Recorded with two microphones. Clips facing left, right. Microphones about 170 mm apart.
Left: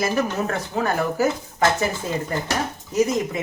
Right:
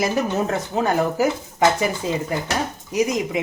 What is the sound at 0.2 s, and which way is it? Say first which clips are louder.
Speech: right 2 dB; 20° right (ahead or behind).